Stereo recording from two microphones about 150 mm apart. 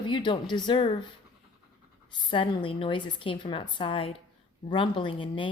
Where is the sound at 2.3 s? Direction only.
35° left (ahead or behind).